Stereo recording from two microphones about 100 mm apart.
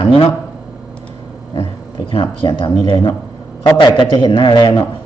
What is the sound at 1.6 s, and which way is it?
Speech, 65° left (ahead or behind).